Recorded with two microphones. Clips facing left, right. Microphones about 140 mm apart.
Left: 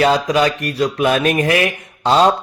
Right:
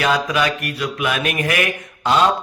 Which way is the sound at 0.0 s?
30° left (ahead or behind).